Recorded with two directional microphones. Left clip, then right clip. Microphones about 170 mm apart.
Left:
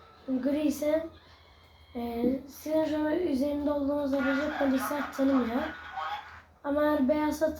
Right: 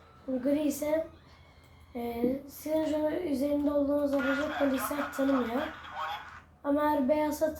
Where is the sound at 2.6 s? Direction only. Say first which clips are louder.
Left 1 dB; 20° right (ahead or behind).